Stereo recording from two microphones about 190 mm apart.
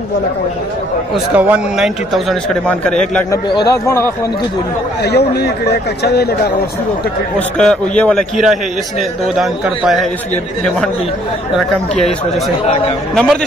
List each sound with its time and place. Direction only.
1.1 s a man's voice: 5° right (ahead or behind)
3.3 s speech: 20° left (ahead or behind)
5.0 s speech: 60° left (ahead or behind)
7.3 s a man's voice: 5° left (ahead or behind)
12.6 s a man's voice: 30° left (ahead or behind)
13.1 s a man's voice: centre (ahead or behind)